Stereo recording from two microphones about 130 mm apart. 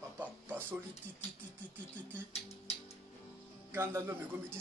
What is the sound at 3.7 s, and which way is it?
Speech, 20° right (ahead or behind).